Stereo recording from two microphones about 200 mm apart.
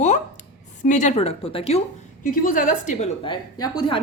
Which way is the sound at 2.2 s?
45° left (ahead or behind).